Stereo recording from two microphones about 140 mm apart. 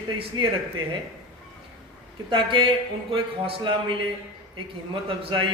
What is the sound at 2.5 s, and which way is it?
A man's voice, 35° right (ahead or behind).